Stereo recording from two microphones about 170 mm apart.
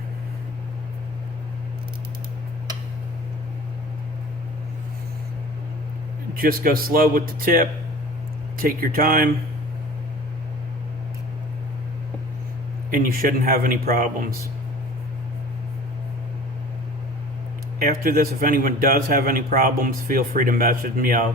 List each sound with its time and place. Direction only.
6.3 s a man's voice: 60° right (ahead or behind)
12.9 s a man's voice: 55° right (ahead or behind)
17.8 s a man's voice: 60° right (ahead or behind)